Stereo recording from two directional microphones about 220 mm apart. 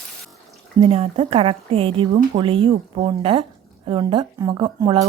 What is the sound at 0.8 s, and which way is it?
A woman's voice, 25° right (ahead or behind).